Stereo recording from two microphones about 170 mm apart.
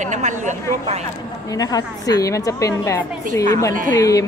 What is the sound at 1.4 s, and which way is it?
A woman's voice, 20° left (ahead or behind).